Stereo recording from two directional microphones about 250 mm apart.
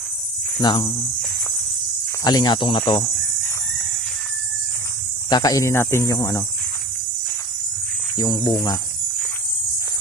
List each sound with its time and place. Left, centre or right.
0.6 s speech: centre
2.2 s speech: centre
5.3 s speech: centre
8.2 s speech: centre